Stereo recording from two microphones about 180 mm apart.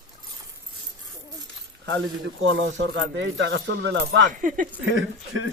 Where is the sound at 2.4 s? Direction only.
85° right.